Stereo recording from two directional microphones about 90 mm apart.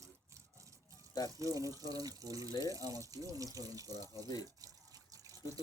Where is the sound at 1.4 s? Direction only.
40° right (ahead or behind).